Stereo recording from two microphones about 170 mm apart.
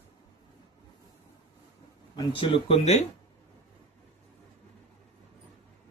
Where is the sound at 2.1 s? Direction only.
30° left (ahead or behind).